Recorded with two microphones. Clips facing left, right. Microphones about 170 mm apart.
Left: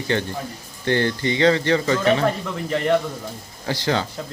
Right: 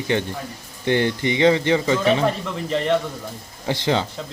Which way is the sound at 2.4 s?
5° left (ahead or behind).